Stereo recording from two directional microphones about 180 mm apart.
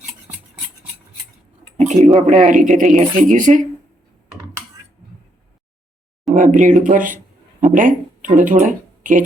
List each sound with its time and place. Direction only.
2.0 s speech: 35° right (ahead or behind)
6.3 s speech: 45° right (ahead or behind)